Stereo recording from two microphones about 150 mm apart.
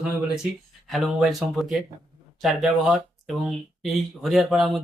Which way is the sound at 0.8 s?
Centre (ahead or behind).